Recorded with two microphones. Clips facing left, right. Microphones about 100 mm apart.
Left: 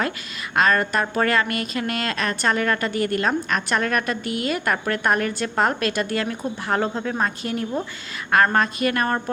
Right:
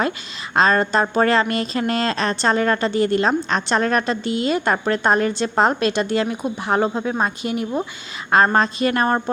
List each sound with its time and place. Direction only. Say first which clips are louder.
0.5 s a woman's voice: right 3 dB; 25° right (ahead or behind)